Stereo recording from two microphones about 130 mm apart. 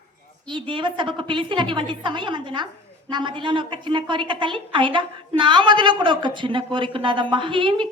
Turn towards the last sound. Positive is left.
turn(degrees=-40)  # may be behind; listen again after turning